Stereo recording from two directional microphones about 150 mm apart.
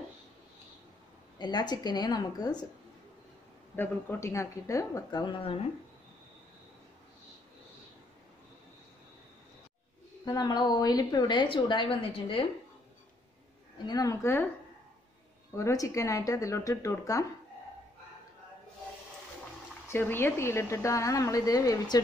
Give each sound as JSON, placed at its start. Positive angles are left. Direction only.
{"t": 1.4, "sound": "a woman's voice", "side_deg": 30}
{"t": 3.7, "sound": "a woman's voice", "side_deg": 15}
{"t": 10.2, "sound": "a woman's voice", "side_deg": 25}
{"t": 13.8, "sound": "a woman's voice", "side_deg": 25}
{"t": 15.5, "sound": "a woman's voice", "side_deg": 20}
{"t": 19.9, "sound": "a woman's voice", "side_deg": 15}